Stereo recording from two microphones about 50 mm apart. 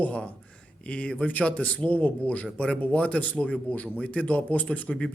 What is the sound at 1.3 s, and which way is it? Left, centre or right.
A man's voice, left.